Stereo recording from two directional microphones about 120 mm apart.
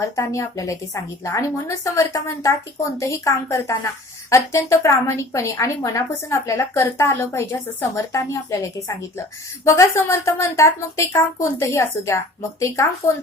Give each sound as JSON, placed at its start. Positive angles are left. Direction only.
{"t": 0.0, "sound": "a woman's voice", "side_deg": 25}